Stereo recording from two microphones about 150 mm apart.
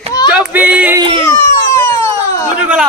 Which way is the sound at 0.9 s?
30° right (ahead or behind).